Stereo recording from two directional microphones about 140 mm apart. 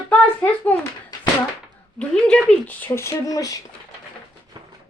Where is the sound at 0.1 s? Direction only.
10° left (ahead or behind).